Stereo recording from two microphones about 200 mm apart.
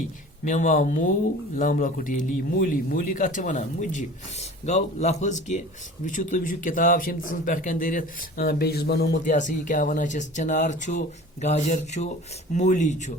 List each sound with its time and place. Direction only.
0.4 s speech: 40° left (ahead or behind)
9.2 s speech: 40° left (ahead or behind)